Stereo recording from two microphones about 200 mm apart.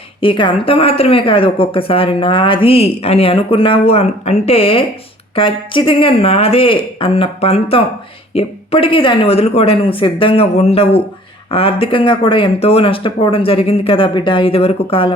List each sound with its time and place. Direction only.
0.2 s speech: 25° left (ahead or behind)